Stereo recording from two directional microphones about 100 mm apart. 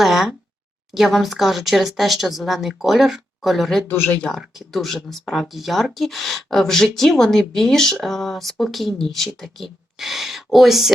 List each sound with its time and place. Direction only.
0.0 s a sound: 5° right (ahead or behind)
0.9 s speech: centre (ahead or behind)
3.8 s speech: 25° left (ahead or behind)
4.4 s speech: centre (ahead or behind)